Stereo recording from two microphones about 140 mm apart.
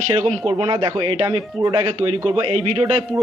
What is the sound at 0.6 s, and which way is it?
Speech, 40° right (ahead or behind).